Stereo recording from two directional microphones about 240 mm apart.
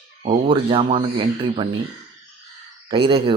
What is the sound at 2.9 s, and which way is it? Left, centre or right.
Speech, right.